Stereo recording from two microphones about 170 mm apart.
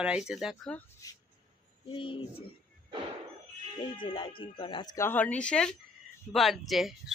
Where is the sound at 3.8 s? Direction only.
30° left (ahead or behind).